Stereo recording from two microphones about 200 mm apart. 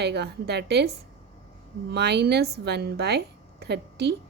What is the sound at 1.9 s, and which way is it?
A woman's voice, 55° right (ahead or behind).